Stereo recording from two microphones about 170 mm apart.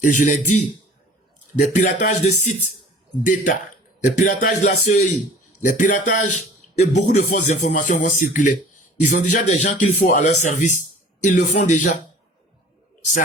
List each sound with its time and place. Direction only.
0.0 s speech: 50° left (ahead or behind)
4.2 s speech: 50° left (ahead or behind)